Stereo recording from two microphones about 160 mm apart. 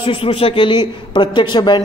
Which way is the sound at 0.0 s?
35° left (ahead or behind).